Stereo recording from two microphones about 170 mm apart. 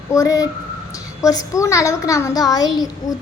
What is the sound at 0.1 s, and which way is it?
A child's voice, 20° left (ahead or behind).